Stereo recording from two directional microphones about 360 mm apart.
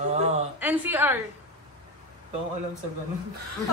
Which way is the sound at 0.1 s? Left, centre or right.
Centre.